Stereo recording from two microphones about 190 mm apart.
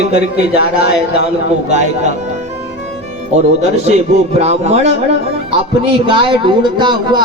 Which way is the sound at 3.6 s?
35° right (ahead or behind).